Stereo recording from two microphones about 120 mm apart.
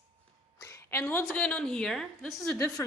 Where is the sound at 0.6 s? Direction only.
20° left (ahead or behind).